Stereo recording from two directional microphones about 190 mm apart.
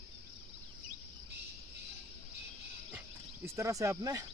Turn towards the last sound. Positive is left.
turn(degrees=-15)  # may be behind; listen again after turning